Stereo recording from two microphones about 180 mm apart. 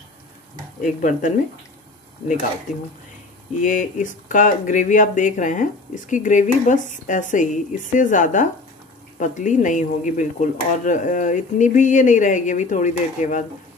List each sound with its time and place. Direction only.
0.7 s speech: 45° left (ahead or behind)
3.6 s speech: 45° left (ahead or behind)